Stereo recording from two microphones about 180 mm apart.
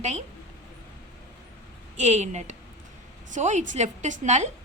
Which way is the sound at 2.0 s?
40° right (ahead or behind).